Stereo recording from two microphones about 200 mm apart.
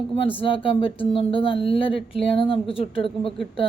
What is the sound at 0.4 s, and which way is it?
Speech, 25° left (ahead or behind).